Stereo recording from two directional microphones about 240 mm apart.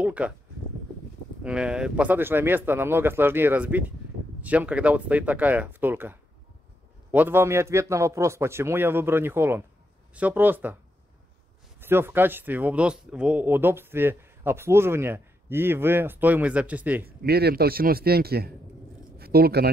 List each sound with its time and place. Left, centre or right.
0.0 s speech: centre
1.4 s speech: centre
11.8 s speech: centre
17.2 s speech: right